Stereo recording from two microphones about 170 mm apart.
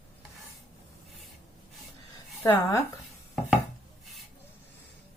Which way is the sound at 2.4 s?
20° left (ahead or behind).